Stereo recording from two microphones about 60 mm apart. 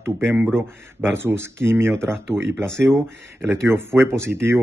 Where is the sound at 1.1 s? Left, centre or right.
Right.